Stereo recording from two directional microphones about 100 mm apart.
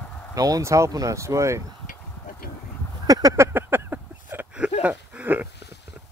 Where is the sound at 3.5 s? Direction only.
20° right (ahead or behind).